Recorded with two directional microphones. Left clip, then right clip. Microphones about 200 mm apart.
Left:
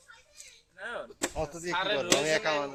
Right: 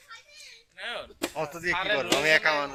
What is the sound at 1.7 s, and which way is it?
Speech, 45° left (ahead or behind).